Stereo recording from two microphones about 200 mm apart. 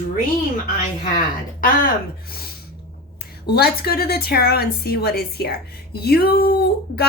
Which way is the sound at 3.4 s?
50° left (ahead or behind).